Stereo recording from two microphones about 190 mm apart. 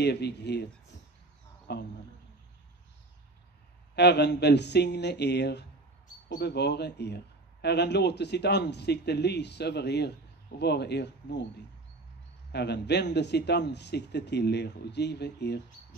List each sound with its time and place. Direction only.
0.0 s a man's voice: 60° left (ahead or behind)
1.7 s a man's voice: 60° left (ahead or behind)
3.9 s a man's voice: 60° left (ahead or behind)
12.5 s a man's voice: 60° left (ahead or behind)